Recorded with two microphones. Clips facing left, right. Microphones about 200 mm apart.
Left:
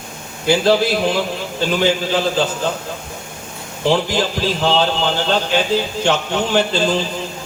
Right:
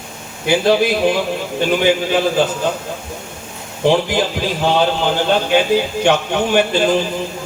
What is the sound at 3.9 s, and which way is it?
A man's voice, 15° right (ahead or behind).